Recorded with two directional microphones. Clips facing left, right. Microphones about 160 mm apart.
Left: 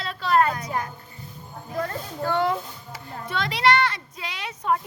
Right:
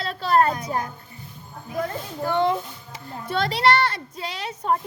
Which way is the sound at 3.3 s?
35° right (ahead or behind).